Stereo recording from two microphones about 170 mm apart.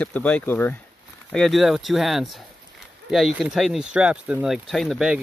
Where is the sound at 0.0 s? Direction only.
5° left (ahead or behind).